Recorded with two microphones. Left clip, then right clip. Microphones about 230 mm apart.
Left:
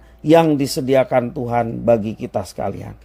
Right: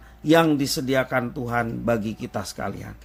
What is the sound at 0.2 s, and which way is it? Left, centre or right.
A man's voice, left.